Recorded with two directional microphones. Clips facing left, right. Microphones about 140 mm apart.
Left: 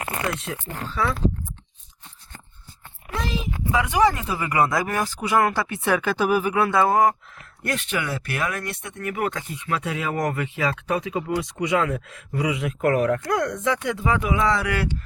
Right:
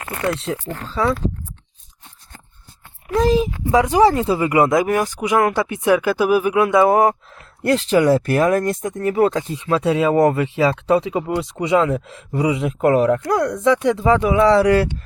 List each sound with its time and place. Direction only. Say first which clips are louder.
0.3 s speech: right 6 dB; 30° right (ahead or behind)
3.2 s speech: right 12 dB; 40° right (ahead or behind)